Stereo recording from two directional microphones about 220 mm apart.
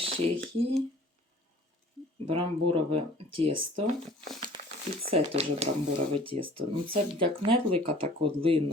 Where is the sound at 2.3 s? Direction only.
25° right (ahead or behind).